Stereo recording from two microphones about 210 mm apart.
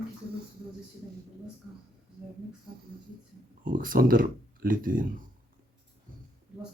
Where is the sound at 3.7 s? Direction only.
40° right (ahead or behind).